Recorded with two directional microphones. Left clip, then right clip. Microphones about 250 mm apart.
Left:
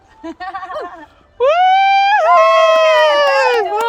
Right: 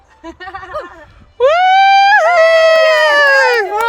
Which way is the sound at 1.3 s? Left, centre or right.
Centre.